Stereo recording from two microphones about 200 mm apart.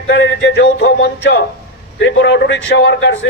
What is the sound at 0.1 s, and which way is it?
A man's voice, 60° left (ahead or behind).